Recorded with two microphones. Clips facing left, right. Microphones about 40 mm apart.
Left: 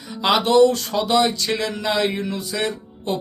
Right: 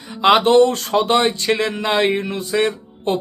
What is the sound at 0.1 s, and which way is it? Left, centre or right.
Music, right.